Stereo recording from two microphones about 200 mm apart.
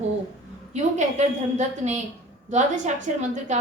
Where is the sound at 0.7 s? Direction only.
35° right (ahead or behind).